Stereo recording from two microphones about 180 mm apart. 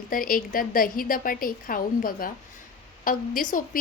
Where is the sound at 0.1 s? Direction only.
50° left (ahead or behind).